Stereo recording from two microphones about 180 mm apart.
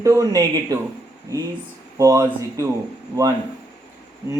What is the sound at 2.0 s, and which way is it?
Speech, 15° right (ahead or behind).